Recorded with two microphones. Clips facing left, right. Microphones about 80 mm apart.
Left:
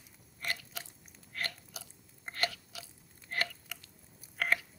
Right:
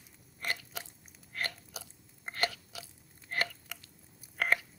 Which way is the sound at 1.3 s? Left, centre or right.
Right.